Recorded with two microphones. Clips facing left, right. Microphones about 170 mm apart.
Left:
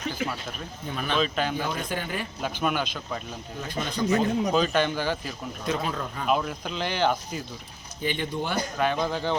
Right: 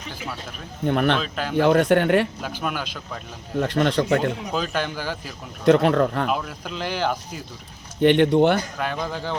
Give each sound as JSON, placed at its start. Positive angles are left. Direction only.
{"t": 0.9, "sound": "speech", "side_deg": -65}
{"t": 1.2, "sound": "speech", "side_deg": 0}
{"t": 1.5, "sound": "speech", "side_deg": -70}
{"t": 2.4, "sound": "speech", "side_deg": -5}
{"t": 3.6, "sound": "speech", "side_deg": -70}
{"t": 4.5, "sound": "speech", "side_deg": -5}
{"t": 5.6, "sound": "speech", "side_deg": -70}
{"t": 6.2, "sound": "speech", "side_deg": 0}
{"t": 8.0, "sound": "speech", "side_deg": -70}
{"t": 8.8, "sound": "speech", "side_deg": -5}